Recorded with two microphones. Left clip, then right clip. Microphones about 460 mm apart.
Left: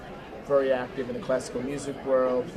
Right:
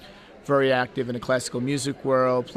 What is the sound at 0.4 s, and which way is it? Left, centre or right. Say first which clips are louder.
Speech: right 3 dB; right.